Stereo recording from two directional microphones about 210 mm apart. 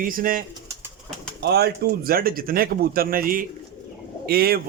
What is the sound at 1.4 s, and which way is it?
A man's voice, 50° right (ahead or behind).